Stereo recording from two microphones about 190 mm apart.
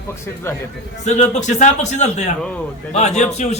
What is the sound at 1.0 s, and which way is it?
A man's voice, 40° left (ahead or behind).